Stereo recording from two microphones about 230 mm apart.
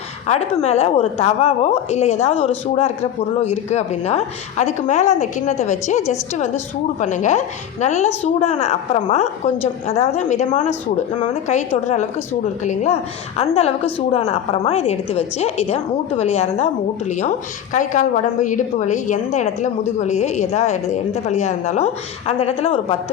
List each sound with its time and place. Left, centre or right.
0.3 s a woman's voice: left